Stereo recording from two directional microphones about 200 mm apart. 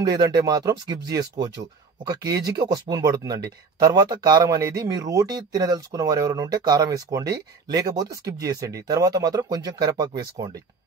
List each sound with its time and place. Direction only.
0.0 s speech: 20° right (ahead or behind)